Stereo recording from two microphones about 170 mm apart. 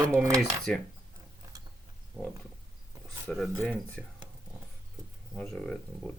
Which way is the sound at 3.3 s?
5° left (ahead or behind).